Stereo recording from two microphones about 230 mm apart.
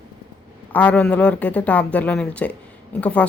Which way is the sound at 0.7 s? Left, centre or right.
Centre.